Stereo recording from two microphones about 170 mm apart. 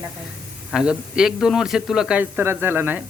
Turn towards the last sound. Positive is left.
turn(degrees=-10)  # may be behind; listen again after turning